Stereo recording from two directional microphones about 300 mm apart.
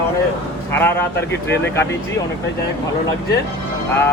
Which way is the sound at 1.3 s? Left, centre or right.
Left.